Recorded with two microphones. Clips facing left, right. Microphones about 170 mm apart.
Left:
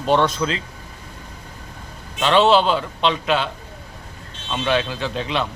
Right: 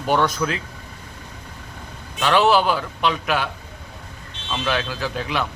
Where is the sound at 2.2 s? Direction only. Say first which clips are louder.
Left 2 dB; 25° left (ahead or behind).